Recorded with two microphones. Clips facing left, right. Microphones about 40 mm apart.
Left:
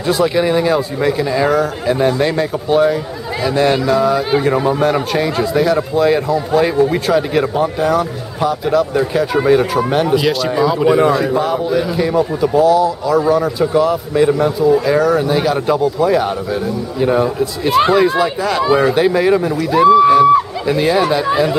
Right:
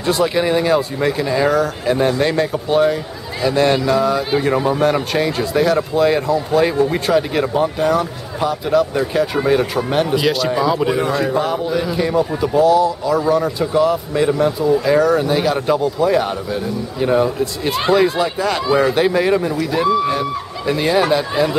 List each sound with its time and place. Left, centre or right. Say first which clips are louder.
0.0 s speech: left 2 dB; centre